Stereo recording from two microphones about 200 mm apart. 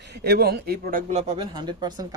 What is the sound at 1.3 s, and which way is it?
Speech, 20° right (ahead or behind).